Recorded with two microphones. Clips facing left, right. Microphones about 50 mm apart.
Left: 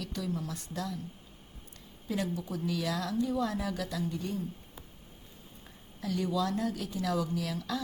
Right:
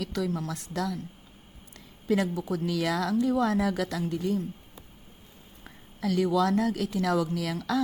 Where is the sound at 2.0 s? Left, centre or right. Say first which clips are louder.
Right 7 dB; right.